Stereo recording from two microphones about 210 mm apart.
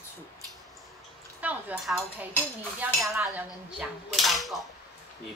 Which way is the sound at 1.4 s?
5° right (ahead or behind).